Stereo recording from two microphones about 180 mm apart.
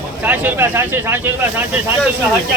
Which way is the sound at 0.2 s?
10° right (ahead or behind).